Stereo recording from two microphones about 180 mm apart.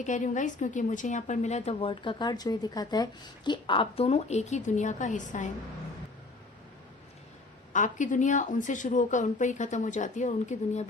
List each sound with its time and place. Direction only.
0.0 s a woman's voice: 45° left (ahead or behind)
7.7 s a woman's voice: 45° left (ahead or behind)